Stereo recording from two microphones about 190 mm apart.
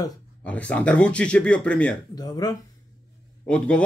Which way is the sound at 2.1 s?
20° left (ahead or behind).